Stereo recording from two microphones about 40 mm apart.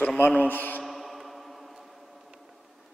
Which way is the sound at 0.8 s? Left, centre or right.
Centre.